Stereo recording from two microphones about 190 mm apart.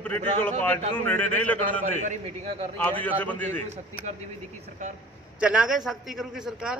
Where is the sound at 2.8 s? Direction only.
10° left (ahead or behind).